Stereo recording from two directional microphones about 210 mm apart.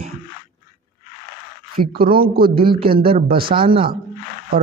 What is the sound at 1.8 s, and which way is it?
A man's voice, 45° right (ahead or behind).